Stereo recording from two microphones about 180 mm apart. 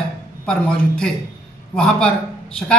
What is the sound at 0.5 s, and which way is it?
Speech, 5° left (ahead or behind).